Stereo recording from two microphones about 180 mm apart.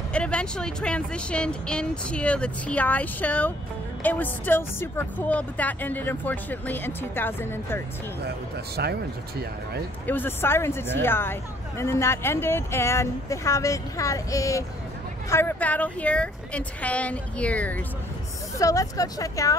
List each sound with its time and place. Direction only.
0.1 s speech: 5° left (ahead or behind)
8.8 s speech: 65° right (ahead or behind)
10.0 s speech: 10° left (ahead or behind)